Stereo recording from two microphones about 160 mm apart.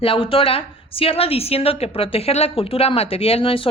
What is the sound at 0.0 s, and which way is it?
A woman's voice, 35° left (ahead or behind).